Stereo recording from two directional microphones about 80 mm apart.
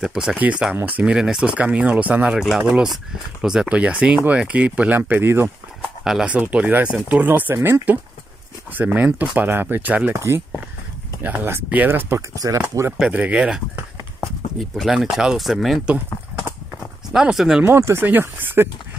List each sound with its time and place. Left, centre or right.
0.0 s speech: centre
0.4 s speech: centre
2.4 s speech: centre; by 5.5 s right
5.8 s a sound: centre
6.2 s speech: centre
7.5 s speech: right
8.7 s speech: right
10.1 s speech: right
12.4 s speech: right
13.1 s speech: centre
14.2 s speech: centre
17.1 s speech: centre
17.7 s speech: right
18.0 s speech: right